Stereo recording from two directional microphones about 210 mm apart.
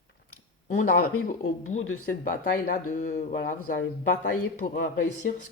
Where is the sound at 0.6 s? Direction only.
40° left (ahead or behind).